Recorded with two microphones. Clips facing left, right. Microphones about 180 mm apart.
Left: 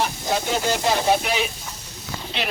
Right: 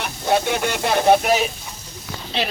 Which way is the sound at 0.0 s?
65° right (ahead or behind).